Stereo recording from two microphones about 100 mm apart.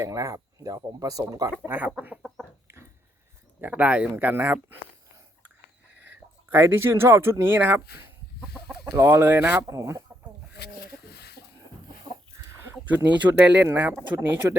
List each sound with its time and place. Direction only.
0.0 s speech: 35° right (ahead or behind)
1.6 s speech: 20° right (ahead or behind)
3.6 s speech: 15° right (ahead or behind)
6.5 s speech: 25° right (ahead or behind)
9.0 s speech: 20° right (ahead or behind)
9.6 s speech: 30° right (ahead or behind)
12.7 s speech: 15° right (ahead or behind)